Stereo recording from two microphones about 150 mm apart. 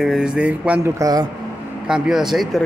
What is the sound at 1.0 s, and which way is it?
Speech, 25° right (ahead or behind).